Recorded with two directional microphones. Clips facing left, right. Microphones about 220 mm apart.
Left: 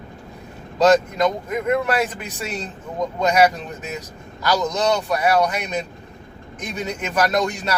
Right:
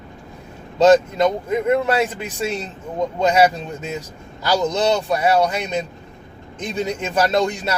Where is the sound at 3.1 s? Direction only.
30° right (ahead or behind).